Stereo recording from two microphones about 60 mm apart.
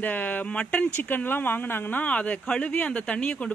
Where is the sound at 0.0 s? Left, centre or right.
Left.